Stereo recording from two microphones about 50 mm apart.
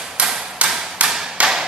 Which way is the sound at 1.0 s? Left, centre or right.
Centre.